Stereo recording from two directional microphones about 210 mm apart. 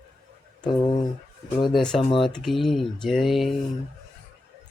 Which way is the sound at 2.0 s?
25° left (ahead or behind).